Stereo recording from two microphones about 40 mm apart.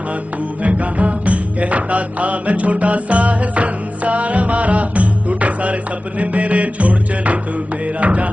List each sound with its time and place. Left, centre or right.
0.7 s music: right